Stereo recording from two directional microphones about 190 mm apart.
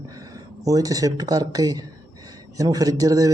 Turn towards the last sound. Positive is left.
turn(degrees=-20)  # may be behind; listen again after turning